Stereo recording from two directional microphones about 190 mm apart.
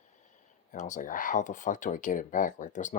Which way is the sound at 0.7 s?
40° left (ahead or behind).